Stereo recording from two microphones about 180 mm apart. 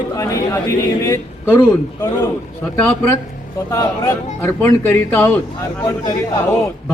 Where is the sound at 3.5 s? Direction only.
20° left (ahead or behind).